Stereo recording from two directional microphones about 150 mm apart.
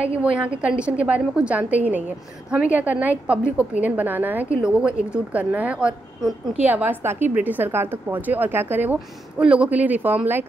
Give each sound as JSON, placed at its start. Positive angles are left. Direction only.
{"t": 0.0, "sound": "a woman's voice", "side_deg": -10}